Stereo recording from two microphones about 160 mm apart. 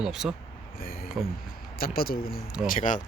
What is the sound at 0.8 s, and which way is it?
Speech, 65° left (ahead or behind).